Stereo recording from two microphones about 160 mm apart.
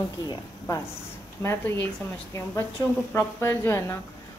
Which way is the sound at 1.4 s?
15° left (ahead or behind).